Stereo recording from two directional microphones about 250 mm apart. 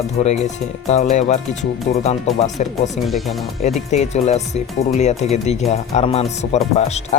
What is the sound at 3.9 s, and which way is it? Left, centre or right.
Speech, left.